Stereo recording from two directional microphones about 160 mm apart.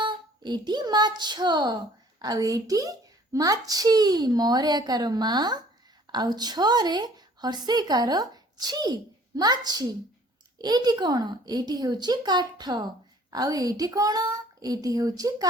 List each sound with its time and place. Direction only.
0.0 s child singing: 30° right (ahead or behind)
3.3 s a woman's voice: 20° right (ahead or behind)